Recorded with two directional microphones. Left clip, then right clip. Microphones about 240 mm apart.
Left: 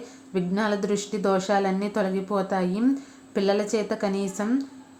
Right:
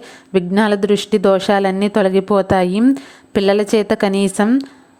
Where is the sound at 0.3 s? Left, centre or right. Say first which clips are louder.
Right 11 dB; right.